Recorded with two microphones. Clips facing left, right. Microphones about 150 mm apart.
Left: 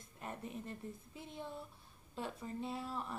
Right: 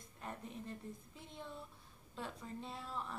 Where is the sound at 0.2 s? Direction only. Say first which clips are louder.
Left 2 dB; 5° left (ahead or behind).